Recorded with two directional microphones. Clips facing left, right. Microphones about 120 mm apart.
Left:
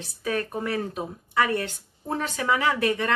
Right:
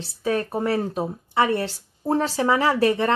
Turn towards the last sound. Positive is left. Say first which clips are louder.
# right 4 dB
turn(degrees=-30)  # may be behind; listen again after turning